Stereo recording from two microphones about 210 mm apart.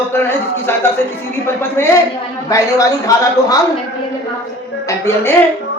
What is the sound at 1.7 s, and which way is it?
Speech, 10° left (ahead or behind).